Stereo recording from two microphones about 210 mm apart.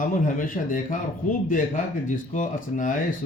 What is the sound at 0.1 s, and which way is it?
A man's voice, 40° left (ahead or behind).